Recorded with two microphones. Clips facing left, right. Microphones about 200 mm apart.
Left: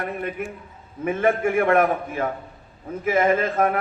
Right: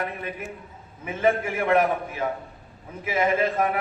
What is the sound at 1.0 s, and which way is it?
A man's voice, 50° left (ahead or behind).